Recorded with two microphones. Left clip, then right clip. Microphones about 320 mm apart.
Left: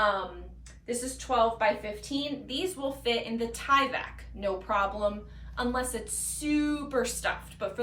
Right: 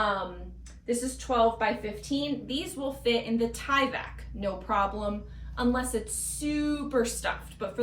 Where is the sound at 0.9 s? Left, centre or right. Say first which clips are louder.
Right 2 dB; centre.